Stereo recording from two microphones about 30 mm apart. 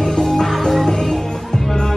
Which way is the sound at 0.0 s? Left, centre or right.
Centre.